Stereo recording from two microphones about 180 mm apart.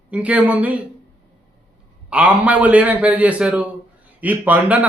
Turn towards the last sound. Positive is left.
turn(degrees=-10)  # may be behind; listen again after turning